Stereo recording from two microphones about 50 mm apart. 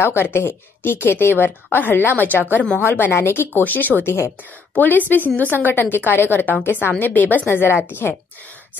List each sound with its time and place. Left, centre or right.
0.3 s a woman's voice: left
2.8 s a woman's voice: left
3.6 s a woman's voice: left
4.0 s speech: left
4.7 s a woman's voice: left